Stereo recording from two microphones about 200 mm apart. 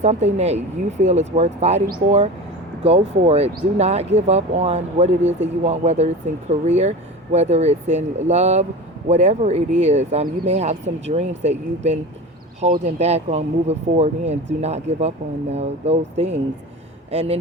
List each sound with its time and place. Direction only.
0.0 s speech: 35° right (ahead or behind)